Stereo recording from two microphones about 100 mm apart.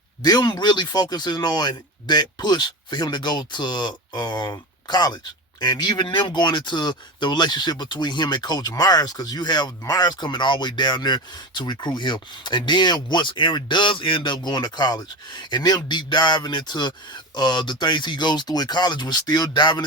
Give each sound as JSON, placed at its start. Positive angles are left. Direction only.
{"t": 0.2, "sound": "speech", "side_deg": 45}